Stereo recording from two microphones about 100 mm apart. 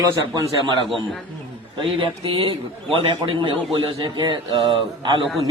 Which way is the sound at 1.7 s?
60° right (ahead or behind).